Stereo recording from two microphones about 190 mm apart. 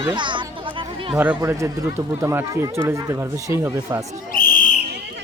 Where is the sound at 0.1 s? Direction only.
25° right (ahead or behind).